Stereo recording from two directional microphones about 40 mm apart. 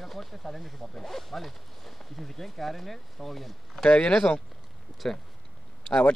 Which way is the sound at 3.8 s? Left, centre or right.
Left.